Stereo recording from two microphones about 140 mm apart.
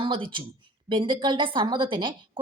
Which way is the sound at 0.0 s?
35° right (ahead or behind).